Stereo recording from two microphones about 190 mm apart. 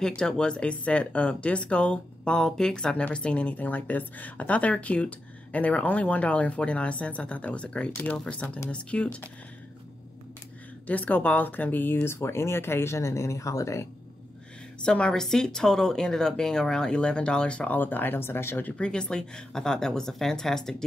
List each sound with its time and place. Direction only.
0.0 s speech: 5° left (ahead or behind)
10.9 s speech: 10° left (ahead or behind)
14.9 s speech: 5° left (ahead or behind)